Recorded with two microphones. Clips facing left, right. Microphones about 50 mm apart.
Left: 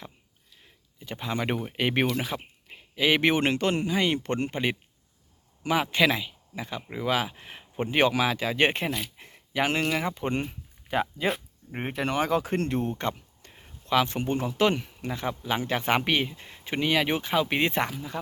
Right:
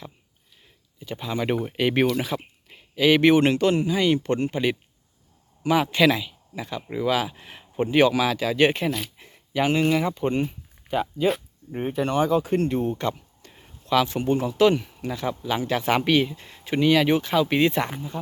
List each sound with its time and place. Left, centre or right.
0.9 s speech: left
1.7 s speech: left
5.6 s speech: centre
7.9 s speech: left
9.1 s a sound: left
10.0 s speech: left
10.9 s speech: left
12.2 s speech: left
12.5 s speech: left
13.0 s a sound: left
13.8 s speech: left